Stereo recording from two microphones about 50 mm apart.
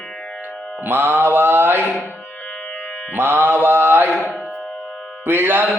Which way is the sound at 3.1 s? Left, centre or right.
Right.